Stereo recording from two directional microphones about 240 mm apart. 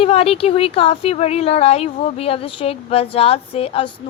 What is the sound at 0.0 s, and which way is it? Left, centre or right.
A woman's voice, left.